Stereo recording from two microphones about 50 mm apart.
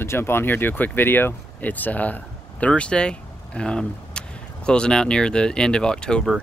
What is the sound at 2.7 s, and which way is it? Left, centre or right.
Speech, centre.